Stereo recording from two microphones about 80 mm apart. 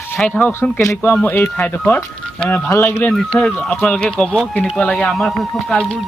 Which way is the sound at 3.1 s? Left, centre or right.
Centre.